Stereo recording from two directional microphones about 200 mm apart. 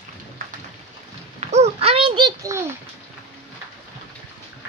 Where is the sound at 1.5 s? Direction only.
30° right (ahead or behind).